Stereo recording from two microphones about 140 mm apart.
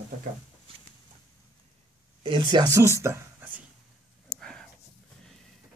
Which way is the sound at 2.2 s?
35° right (ahead or behind).